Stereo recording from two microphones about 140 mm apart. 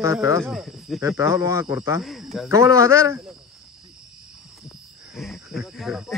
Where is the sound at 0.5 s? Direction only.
Centre (ahead or behind).